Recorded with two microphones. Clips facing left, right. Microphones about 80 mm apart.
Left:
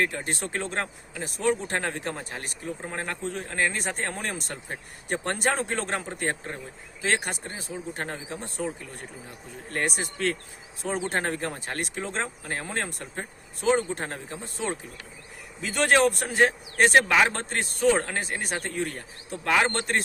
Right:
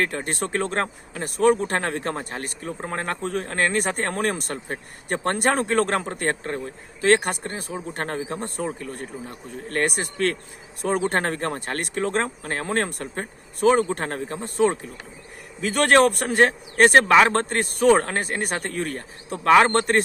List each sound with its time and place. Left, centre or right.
0.0 s speech: right